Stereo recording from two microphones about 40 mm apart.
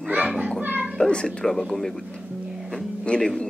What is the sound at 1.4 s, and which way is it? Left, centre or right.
Speech, centre.